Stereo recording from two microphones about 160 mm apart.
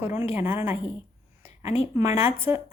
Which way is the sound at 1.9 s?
15° right (ahead or behind).